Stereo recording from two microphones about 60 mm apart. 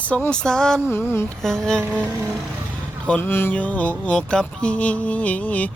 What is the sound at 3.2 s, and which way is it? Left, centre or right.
Speech, left.